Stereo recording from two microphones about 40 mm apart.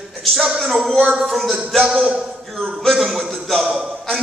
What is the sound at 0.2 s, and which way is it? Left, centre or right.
Speech, centre.